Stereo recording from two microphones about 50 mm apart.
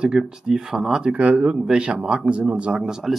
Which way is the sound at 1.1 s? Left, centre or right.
Right.